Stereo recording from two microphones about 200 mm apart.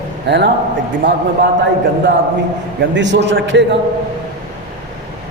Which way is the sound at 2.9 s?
65° right (ahead or behind).